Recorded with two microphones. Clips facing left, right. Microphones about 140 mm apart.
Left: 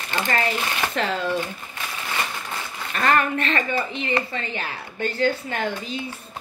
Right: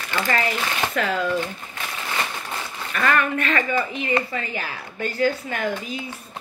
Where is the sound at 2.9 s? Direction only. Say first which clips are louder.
Left 1 dB; 35° left (ahead or behind).